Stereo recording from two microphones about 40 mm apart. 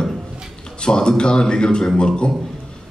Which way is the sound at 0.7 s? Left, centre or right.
Left.